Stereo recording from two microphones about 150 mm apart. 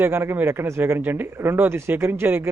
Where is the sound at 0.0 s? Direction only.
15° right (ahead or behind).